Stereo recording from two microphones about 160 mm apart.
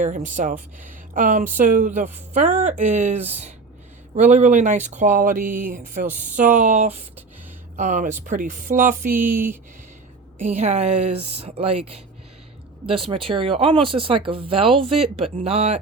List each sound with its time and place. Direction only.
0.0 s speech: 55° right (ahead or behind)
2.3 s speech: 45° right (ahead or behind)
10.5 s speech: 40° right (ahead or behind)